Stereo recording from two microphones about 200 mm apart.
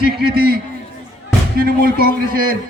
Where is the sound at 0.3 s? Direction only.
50° right (ahead or behind).